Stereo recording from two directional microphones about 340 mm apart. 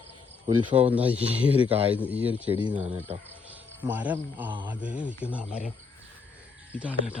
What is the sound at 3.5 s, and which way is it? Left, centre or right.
Speech, centre.